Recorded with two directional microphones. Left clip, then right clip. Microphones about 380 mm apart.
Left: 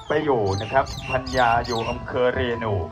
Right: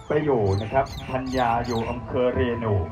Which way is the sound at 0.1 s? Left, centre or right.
Centre.